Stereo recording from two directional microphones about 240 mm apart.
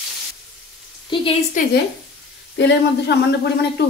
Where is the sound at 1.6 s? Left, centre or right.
Left.